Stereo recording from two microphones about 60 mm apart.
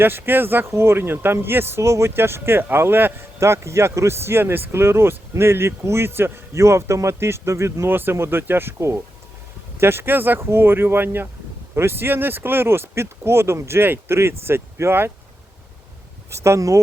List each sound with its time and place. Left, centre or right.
0.0 s speech: right
1.8 s speech: right
3.4 s speech: right
6.5 s speech: right
7.9 s speech: right
16.3 s speech: right